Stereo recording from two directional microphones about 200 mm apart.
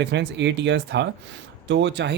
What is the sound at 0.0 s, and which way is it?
Speech, 60° right (ahead or behind).